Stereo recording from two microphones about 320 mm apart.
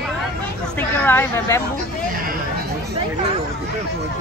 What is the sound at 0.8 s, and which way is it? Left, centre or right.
Speech, centre.